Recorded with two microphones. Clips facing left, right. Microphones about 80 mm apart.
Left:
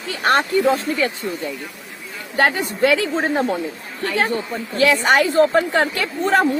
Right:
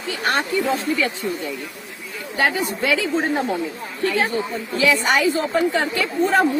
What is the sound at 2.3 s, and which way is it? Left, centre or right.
Speech, left.